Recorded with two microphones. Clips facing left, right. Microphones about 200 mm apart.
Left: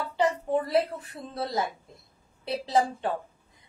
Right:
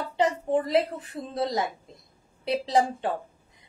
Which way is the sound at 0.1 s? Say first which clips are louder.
Right 2 dB; 20° right (ahead or behind).